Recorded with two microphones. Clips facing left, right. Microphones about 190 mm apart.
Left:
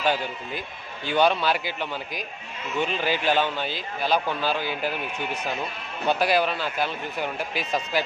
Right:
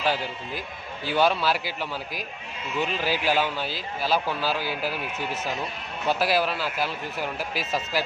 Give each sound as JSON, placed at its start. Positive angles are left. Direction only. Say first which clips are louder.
{"t": 0.0, "sound": "a man's voice", "louder": "left 1 dB", "side_deg": 0}